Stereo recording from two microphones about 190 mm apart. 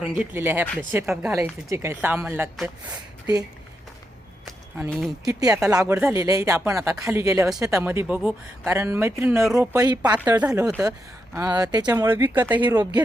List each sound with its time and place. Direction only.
0.0 s speech: 10° right (ahead or behind)
4.8 s speech: centre (ahead or behind)
5.2 s speech: 20° right (ahead or behind)
10.2 s speech: 10° right (ahead or behind)